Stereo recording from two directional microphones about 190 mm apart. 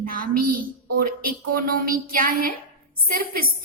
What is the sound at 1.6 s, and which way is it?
A woman's voice, 50° right (ahead or behind).